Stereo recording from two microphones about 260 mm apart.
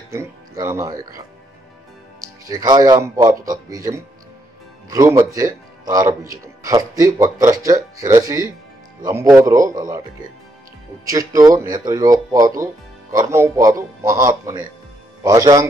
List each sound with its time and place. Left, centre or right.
0.1 s speech: centre
2.4 s speech: centre
4.8 s speech: centre
11.1 s speech: centre